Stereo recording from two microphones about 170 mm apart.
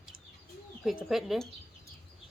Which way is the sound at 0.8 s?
Centre (ahead or behind).